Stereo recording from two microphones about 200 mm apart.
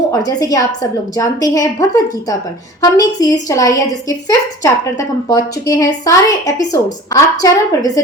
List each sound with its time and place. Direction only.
0.1 s a woman's voice: 20° left (ahead or behind)
3.0 s a woman's voice: 20° left (ahead or behind)